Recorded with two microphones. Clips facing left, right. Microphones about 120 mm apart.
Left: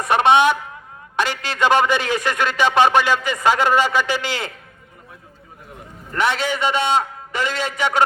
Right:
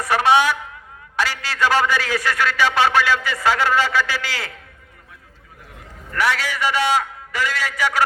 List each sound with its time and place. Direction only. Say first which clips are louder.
0.0 s a man's voice: left 2 dB; 20° left (ahead or behind)
6.1 s a man's voice: left 1 dB; 25° left (ahead or behind)